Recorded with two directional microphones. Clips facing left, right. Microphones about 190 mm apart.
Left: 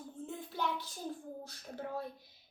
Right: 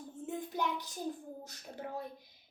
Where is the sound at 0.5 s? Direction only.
15° right (ahead or behind).